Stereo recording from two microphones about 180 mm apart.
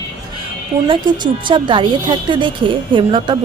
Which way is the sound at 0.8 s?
25° right (ahead or behind).